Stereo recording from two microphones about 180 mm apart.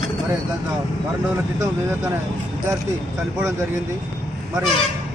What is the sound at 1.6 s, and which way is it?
Speech, 15° right (ahead or behind).